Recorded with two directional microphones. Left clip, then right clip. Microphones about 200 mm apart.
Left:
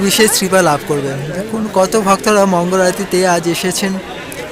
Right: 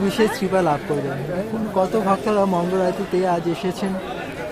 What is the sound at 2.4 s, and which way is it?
Speech, 15° left (ahead or behind).